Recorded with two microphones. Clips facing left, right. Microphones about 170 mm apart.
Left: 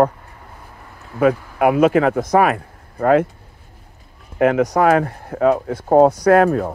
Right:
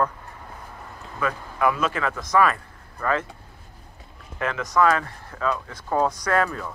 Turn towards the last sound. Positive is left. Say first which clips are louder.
# left 11 dB
turn(degrees=55)  # may be behind; listen again after turning